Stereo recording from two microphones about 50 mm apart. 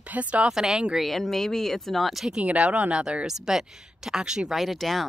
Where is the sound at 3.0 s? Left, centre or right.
Centre.